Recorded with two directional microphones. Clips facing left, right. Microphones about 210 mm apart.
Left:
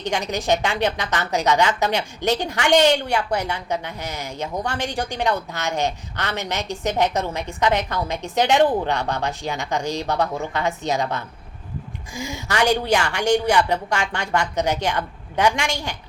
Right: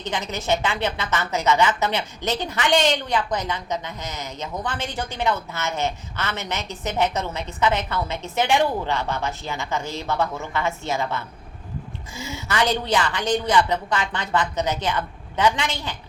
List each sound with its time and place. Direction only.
0.0 s a woman's voice: 15° left (ahead or behind)